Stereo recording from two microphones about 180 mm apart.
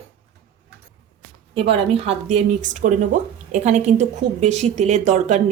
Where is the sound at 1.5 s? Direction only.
30° right (ahead or behind).